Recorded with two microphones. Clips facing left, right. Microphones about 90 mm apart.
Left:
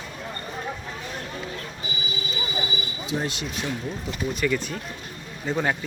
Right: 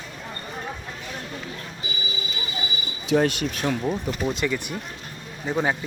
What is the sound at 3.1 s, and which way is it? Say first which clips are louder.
Speech: right 8 dB; 65° right (ahead or behind).